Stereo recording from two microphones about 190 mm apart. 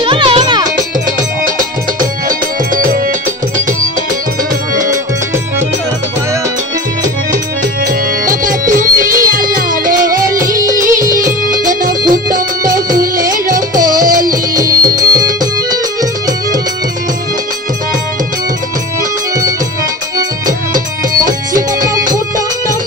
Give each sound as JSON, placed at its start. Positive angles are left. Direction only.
{"t": 0.0, "sound": "music", "side_deg": -25}
{"t": 2.2, "sound": "music", "side_deg": -45}
{"t": 7.8, "sound": "music", "side_deg": -45}
{"t": 14.6, "sound": "music", "side_deg": -20}
{"t": 20.7, "sound": "music", "side_deg": -45}